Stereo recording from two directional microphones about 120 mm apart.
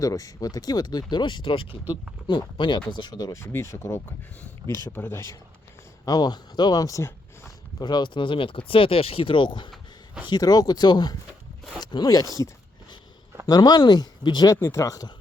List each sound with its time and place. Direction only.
0.0 s speech: 30° left (ahead or behind)
6.1 s speech: 35° left (ahead or behind)
13.5 s speech: 35° left (ahead or behind)
14.5 s speech: 25° left (ahead or behind)